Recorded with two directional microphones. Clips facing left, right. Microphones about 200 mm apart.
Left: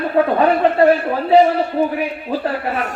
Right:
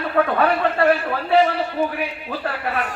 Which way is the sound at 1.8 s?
40° left (ahead or behind).